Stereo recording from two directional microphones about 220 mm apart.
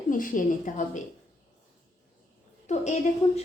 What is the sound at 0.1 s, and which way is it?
Speech, 35° left (ahead or behind).